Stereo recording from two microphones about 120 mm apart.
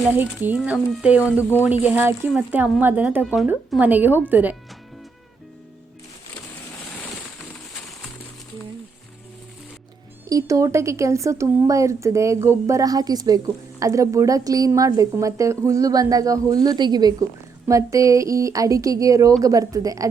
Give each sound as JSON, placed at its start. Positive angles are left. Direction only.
{"t": 0.1, "sound": "speech", "side_deg": -15}
{"t": 10.2, "sound": "a woman's voice", "side_deg": -30}